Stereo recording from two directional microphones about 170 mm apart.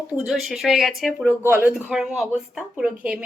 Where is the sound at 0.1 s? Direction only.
5° right (ahead or behind).